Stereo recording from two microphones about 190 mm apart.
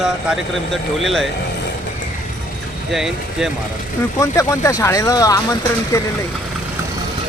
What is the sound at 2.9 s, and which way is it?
Speech, centre (ahead or behind).